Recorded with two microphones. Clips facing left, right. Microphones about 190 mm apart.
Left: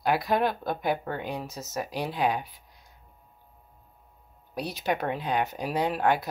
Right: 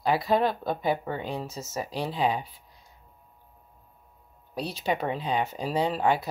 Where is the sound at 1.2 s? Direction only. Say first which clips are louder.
Right 1 dB; 10° left (ahead or behind).